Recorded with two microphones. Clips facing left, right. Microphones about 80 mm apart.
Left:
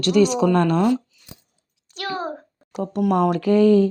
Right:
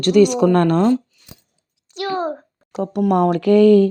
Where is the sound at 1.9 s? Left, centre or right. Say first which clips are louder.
Right 5 dB; right.